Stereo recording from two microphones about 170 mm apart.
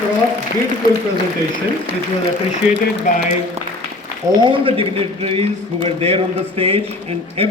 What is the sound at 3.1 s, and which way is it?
Speech, 50° left (ahead or behind).